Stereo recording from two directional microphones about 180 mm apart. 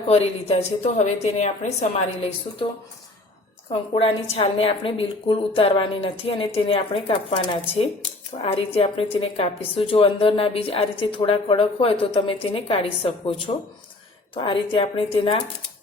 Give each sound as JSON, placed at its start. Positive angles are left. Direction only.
{"t": 0.1, "sound": "a woman's voice", "side_deg": 35}
{"t": 3.7, "sound": "a woman's voice", "side_deg": 30}